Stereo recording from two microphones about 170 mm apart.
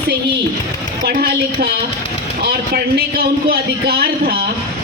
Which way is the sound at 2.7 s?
65° right (ahead or behind).